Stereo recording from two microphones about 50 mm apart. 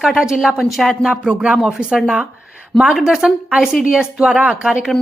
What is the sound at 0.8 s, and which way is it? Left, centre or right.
A woman's voice, centre.